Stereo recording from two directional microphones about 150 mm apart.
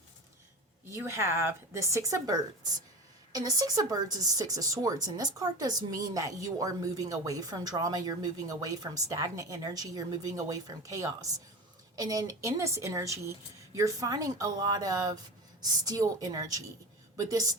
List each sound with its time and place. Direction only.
0.9 s a woman's voice: 20° right (ahead or behind)